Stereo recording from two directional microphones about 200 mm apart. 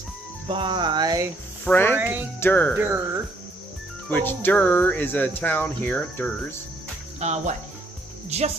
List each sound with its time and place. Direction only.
0.5 s speech: 25° right (ahead or behind)
1.6 s speech: 10° left (ahead or behind)
2.0 s speech: 10° right (ahead or behind)
2.4 s speech: 10° left (ahead or behind)
2.7 s speech: 10° right (ahead or behind)
4.1 s speech: 10° left (ahead or behind)
7.2 s cricket: 35° right (ahead or behind)